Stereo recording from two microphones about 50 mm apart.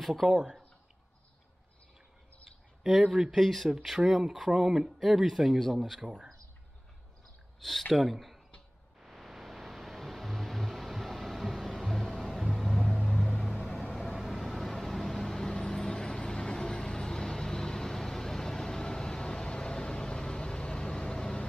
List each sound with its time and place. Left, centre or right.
0.0 s speech: centre
0.3 s speech: centre
3.1 s speech: centre
3.3 s speech: centre
7.9 s speech: centre
9.0 s a sound: centre
12.1 s vehicle: centre
13.9 s vehicle: centre